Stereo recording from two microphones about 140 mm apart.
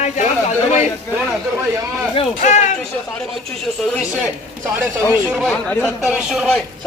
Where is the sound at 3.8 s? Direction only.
5° left (ahead or behind).